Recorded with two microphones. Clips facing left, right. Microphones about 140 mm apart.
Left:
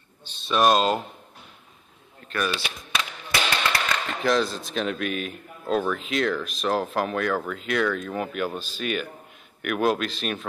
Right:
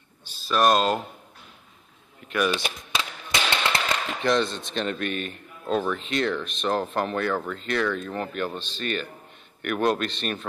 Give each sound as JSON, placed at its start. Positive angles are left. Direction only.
{"t": 0.2, "sound": "speech", "side_deg": -5}
{"t": 2.2, "sound": "speech", "side_deg": -15}
{"t": 3.0, "sound": "a sound", "side_deg": -25}
{"t": 4.2, "sound": "speech", "side_deg": 0}